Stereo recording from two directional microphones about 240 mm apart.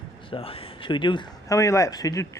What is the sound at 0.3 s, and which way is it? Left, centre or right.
Speech, left.